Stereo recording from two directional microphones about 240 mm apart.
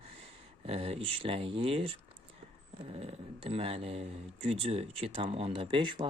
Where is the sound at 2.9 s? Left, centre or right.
Right.